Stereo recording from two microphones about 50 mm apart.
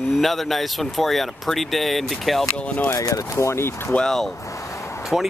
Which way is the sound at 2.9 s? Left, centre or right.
Left.